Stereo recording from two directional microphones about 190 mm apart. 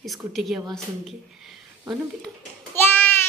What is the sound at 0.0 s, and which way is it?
Speech, centre (ahead or behind).